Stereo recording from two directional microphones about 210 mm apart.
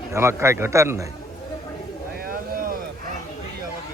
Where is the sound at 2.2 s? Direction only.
45° right (ahead or behind).